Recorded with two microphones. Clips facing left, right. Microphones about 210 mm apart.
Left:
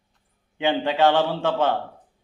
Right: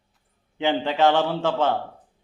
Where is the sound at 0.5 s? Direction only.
15° left (ahead or behind).